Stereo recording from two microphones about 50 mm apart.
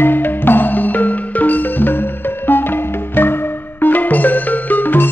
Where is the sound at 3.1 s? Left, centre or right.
Left.